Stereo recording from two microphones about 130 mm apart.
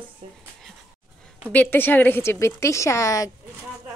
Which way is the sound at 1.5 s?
15° left (ahead or behind).